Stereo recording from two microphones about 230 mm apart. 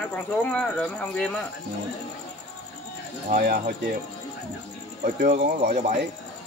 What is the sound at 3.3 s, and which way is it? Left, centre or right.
Speech, right.